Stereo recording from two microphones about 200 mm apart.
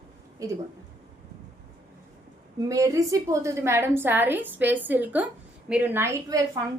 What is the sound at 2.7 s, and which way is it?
A woman's voice, 15° right (ahead or behind).